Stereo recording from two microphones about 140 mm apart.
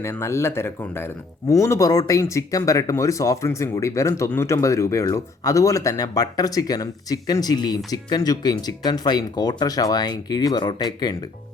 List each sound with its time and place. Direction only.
0.0 s speech: 20° left (ahead or behind)